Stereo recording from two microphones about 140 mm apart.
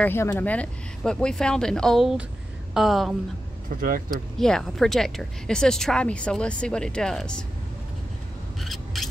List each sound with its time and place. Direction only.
0.0 s speech: 15° left (ahead or behind); by 3.2 s centre (ahead or behind)
3.6 s speech: 90° right
4.1 s speech: 5° left (ahead or behind)
8.5 s scissors: centre (ahead or behind)